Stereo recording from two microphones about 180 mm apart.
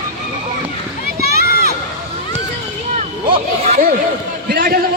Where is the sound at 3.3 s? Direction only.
35° right (ahead or behind).